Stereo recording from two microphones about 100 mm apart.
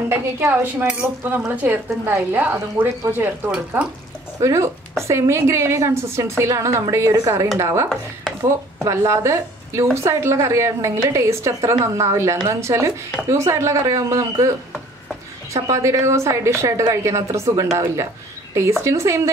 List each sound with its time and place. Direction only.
0.1 s speech: 25° right (ahead or behind)
4.4 s a woman's voice: 35° right (ahead or behind)
15.5 s a woman's voice: 30° right (ahead or behind)